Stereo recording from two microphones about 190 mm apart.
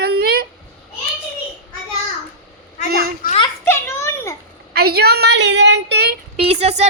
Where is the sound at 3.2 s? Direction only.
50° left (ahead or behind).